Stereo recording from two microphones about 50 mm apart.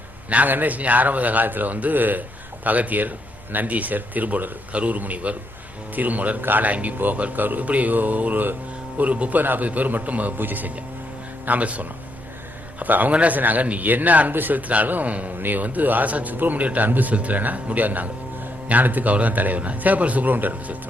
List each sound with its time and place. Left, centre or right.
0.3 s speech: right
9.4 s speech: right